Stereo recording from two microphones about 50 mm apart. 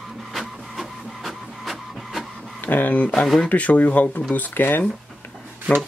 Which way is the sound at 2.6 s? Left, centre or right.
Left.